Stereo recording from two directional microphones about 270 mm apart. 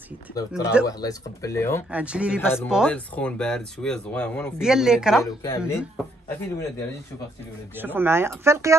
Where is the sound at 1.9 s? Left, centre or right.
Centre.